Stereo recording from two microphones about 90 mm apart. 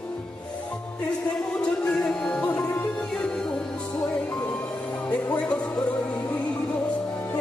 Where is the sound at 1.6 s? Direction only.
10° left (ahead or behind).